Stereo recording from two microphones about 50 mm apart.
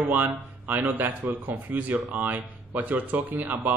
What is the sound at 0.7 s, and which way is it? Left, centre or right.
Speech, right.